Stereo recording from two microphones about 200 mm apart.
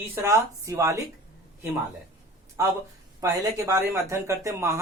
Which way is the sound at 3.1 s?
15° right (ahead or behind).